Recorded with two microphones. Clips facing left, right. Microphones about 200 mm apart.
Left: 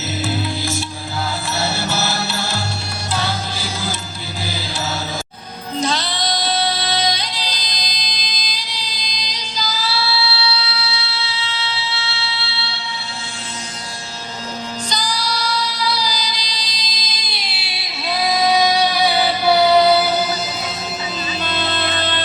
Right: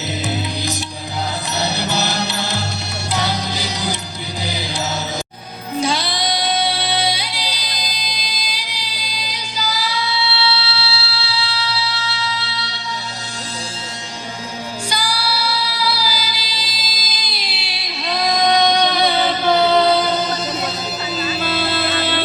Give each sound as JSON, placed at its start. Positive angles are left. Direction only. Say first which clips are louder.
{"t": 0.3, "sound": "music", "louder": "left 2 dB", "side_deg": -20}
{"t": 5.8, "sound": "music", "louder": "right 1 dB", "side_deg": -10}
{"t": 14.8, "sound": "music", "louder": "right 1 dB", "side_deg": -10}
{"t": 21.4, "sound": "music", "louder": "even", "side_deg": -5}